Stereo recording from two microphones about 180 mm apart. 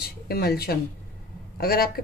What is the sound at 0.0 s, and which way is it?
A woman's voice, 60° left (ahead or behind).